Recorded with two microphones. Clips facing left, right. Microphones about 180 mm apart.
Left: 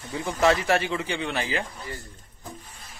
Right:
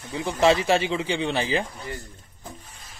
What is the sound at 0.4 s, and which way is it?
Speech, 25° right (ahead or behind).